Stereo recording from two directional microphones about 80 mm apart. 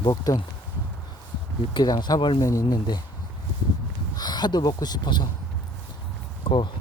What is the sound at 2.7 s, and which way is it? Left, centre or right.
Speech, left.